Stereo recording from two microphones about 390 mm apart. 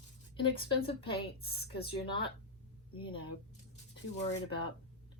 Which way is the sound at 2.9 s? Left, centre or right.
Centre.